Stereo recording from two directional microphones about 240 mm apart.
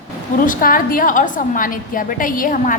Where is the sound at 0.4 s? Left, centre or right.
Left.